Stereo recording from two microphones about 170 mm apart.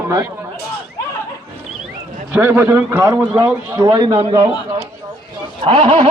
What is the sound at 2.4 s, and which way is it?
A man's voice, 15° right (ahead or behind).